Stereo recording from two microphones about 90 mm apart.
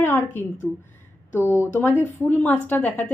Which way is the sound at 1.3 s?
25° left (ahead or behind).